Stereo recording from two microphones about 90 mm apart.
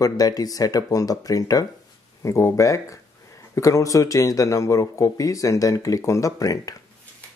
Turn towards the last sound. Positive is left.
turn(degrees=40)  # may be behind; listen again after turning